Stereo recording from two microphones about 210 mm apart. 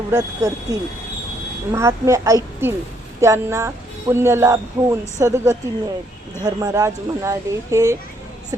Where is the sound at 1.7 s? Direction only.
15° right (ahead or behind).